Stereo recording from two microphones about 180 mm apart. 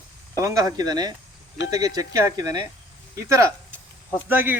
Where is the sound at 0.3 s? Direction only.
20° right (ahead or behind).